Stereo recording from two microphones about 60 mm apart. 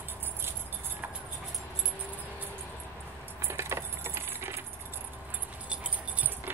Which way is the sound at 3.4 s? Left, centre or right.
Right.